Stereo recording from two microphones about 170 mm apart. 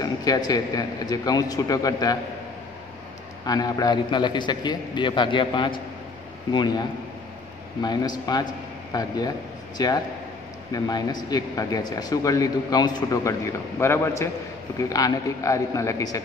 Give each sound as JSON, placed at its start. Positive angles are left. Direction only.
{"t": 0.0, "sound": "speech", "side_deg": 20}
{"t": 3.4, "sound": "speech", "side_deg": 20}
{"t": 9.8, "sound": "speech", "side_deg": 25}